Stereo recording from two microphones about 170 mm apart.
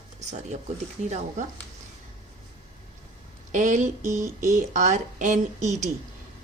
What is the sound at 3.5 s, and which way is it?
Speech, 50° right (ahead or behind).